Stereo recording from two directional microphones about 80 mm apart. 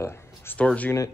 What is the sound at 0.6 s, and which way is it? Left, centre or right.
Speech, centre.